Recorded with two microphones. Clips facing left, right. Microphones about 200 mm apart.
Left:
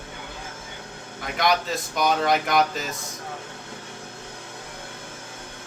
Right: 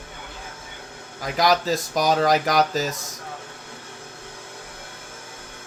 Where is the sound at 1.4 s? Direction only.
40° right (ahead or behind).